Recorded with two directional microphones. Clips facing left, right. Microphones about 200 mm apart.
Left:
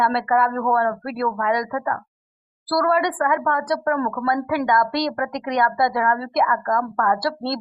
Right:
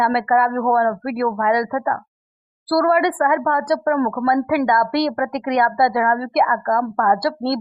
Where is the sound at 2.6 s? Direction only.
25° right (ahead or behind).